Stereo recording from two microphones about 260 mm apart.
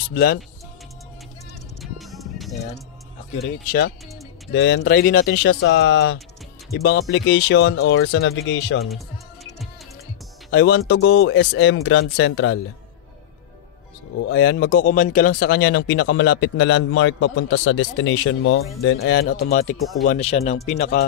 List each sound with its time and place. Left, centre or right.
0.0 s speech: left
1.8 s music: centre
4.5 s speech: left
8.8 s music: centre
10.5 s speech: left
14.3 s speech: left